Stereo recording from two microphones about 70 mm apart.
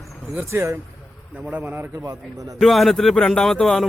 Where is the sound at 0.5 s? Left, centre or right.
Right.